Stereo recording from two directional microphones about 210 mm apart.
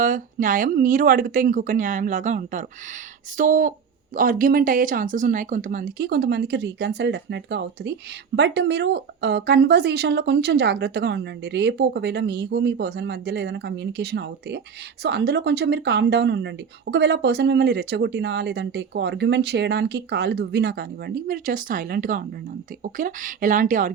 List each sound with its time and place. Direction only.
0.0 s speech: 40° right (ahead or behind)